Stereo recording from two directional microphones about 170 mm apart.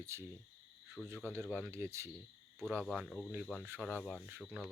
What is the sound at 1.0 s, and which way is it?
Speech, centre (ahead or behind).